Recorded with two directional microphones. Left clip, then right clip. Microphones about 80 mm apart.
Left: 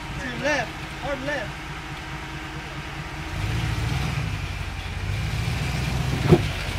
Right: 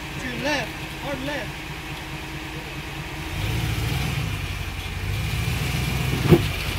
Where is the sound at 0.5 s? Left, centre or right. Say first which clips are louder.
Left 1 dB; right.